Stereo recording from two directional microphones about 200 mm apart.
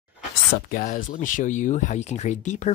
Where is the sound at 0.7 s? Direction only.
45° left (ahead or behind).